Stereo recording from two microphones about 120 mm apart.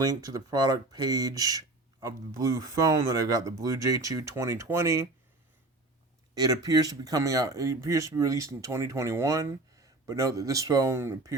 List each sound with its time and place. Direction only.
0.0 s speech: 30° right (ahead or behind)
6.3 s speech: 35° right (ahead or behind)